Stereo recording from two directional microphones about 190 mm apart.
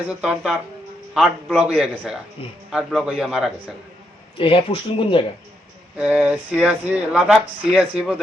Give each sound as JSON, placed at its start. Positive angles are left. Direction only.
{"t": 0.1, "sound": "a man's voice", "side_deg": -5}
{"t": 2.4, "sound": "speech", "side_deg": 30}
{"t": 2.7, "sound": "a man's voice", "side_deg": -5}
{"t": 4.4, "sound": "speech", "side_deg": 30}
{"t": 6.0, "sound": "speech", "side_deg": -5}